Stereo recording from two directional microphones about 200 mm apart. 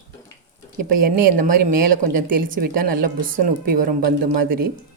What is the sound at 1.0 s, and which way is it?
A woman's voice, 45° right (ahead or behind).